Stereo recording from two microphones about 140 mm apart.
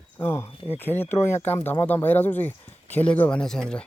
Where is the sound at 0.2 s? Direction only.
20° left (ahead or behind).